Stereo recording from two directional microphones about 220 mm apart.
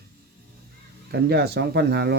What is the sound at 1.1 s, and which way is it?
Speech, 45° right (ahead or behind).